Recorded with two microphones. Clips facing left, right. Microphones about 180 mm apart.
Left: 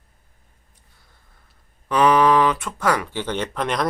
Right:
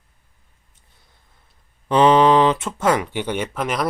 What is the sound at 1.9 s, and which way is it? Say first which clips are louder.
Speech: right 3 dB; 25° right (ahead or behind).